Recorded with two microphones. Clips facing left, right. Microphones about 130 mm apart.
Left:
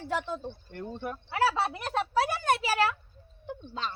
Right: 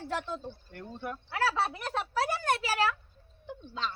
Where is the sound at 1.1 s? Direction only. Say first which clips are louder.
Left 3 dB; 10° left (ahead or behind).